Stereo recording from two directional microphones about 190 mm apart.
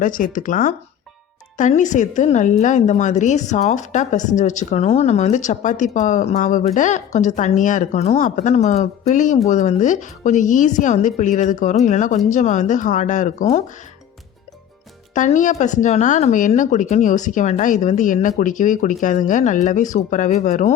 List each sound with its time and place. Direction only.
0.0 s speech: 45° left (ahead or behind)
15.1 s speech: 40° left (ahead or behind)